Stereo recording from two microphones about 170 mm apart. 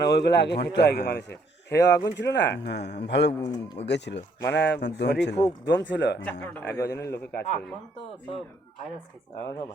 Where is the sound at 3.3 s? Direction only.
25° left (ahead or behind).